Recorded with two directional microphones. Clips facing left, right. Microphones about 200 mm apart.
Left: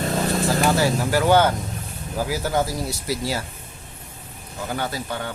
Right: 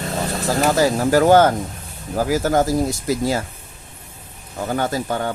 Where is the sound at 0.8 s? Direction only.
45° right (ahead or behind).